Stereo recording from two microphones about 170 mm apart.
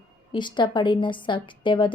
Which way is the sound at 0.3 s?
25° left (ahead or behind).